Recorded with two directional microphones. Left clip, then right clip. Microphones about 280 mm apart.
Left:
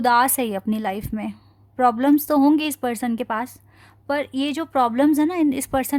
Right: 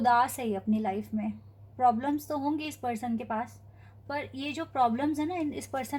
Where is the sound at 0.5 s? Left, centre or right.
Left.